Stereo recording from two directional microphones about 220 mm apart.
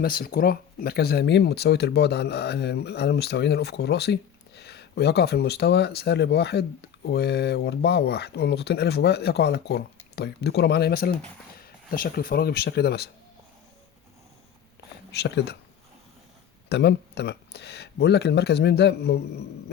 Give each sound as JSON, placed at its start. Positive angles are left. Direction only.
{"t": 0.0, "sound": "speech", "side_deg": 40}
{"t": 15.1, "sound": "speech", "side_deg": 50}
{"t": 16.6, "sound": "speech", "side_deg": 50}